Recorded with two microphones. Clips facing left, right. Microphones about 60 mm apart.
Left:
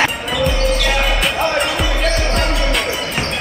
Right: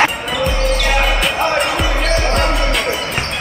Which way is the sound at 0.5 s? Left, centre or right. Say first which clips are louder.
Right 1 dB; centre.